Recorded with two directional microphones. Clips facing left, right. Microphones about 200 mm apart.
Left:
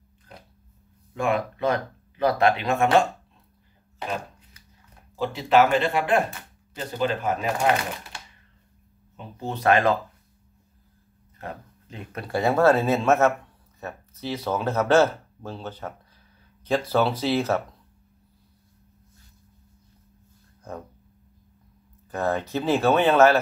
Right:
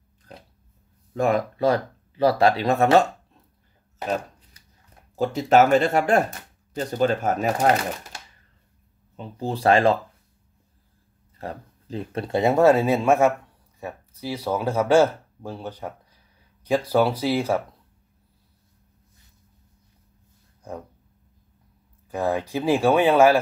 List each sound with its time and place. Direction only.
1.1 s speech: 40° right (ahead or behind)
5.1 s speech: 45° right (ahead or behind)
11.3 s speech: 35° right (ahead or behind); by 17.6 s 10° right (ahead or behind)
20.7 s speech: 10° right (ahead or behind)
22.1 s speech: 10° right (ahead or behind)